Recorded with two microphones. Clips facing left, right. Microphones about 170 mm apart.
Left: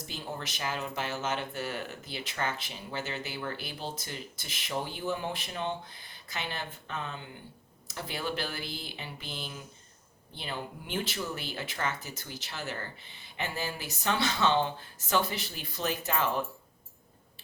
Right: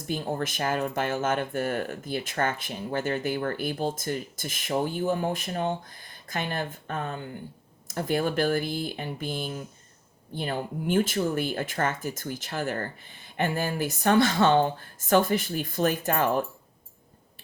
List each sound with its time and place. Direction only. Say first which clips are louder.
0.1 s speech: right 11 dB; 50° right (ahead or behind)